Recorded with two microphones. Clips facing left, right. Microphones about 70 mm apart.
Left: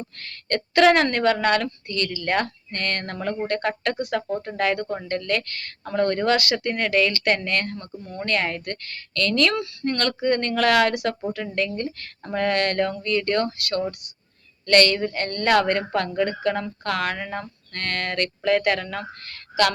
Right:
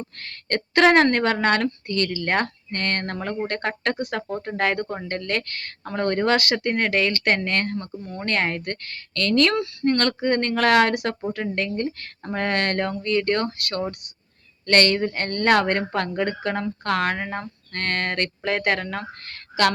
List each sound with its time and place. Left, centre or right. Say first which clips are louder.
0.2 s speech: even; right